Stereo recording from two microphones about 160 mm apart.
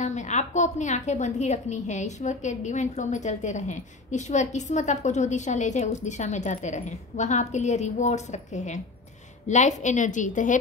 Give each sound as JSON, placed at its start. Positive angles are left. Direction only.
{"t": 0.0, "sound": "a woman's voice", "side_deg": 50}